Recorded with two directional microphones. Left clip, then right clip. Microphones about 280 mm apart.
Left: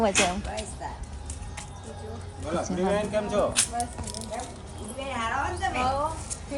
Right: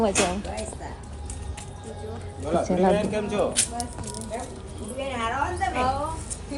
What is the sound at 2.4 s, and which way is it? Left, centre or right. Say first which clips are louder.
A woman's voice: right 6 dB; centre.